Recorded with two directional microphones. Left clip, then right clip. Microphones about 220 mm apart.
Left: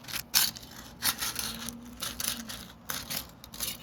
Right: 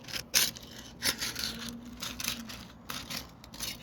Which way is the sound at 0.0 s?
15° left (ahead or behind).